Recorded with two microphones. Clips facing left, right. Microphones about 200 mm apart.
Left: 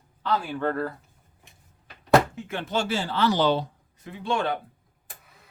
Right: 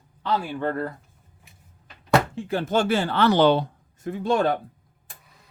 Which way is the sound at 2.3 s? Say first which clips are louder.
Right 6 dB; 35° right (ahead or behind).